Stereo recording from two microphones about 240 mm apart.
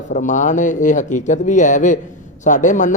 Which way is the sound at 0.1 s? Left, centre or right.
Left.